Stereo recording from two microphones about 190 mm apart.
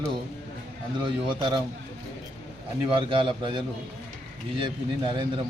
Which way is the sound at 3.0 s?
25° right (ahead or behind).